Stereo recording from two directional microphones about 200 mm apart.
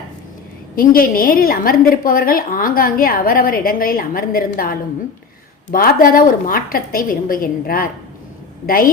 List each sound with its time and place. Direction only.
0.8 s a woman's voice: 45° left (ahead or behind)